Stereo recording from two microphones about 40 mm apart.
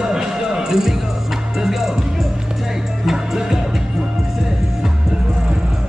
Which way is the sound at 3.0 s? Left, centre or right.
Centre.